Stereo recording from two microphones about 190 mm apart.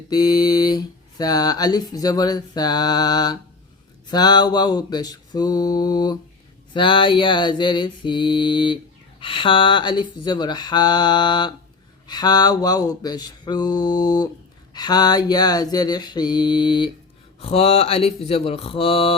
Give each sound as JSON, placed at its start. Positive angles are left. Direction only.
{"t": 0.1, "sound": "speech", "side_deg": 20}
{"t": 17.4, "sound": "mantra", "side_deg": 30}